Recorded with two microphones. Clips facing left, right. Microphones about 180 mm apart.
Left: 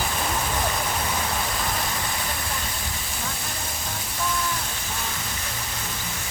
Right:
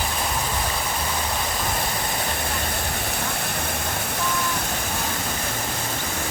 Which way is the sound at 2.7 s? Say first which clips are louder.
Right 6 dB; 65° right (ahead or behind).